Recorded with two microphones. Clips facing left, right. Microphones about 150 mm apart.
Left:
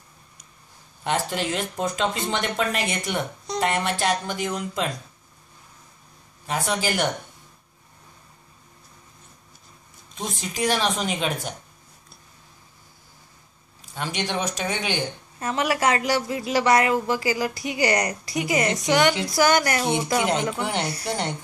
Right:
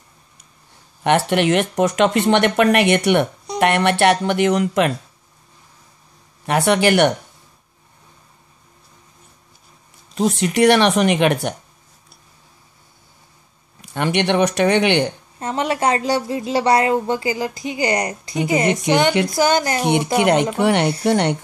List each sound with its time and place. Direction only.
1.0 s speech: 70° right (ahead or behind)
6.4 s speech: 70° right (ahead or behind)
10.1 s speech: 75° right (ahead or behind)
13.7 s speech: 70° right (ahead or behind)
15.3 s a woman's voice: 25° right (ahead or behind)
20.2 s speech: 65° right (ahead or behind)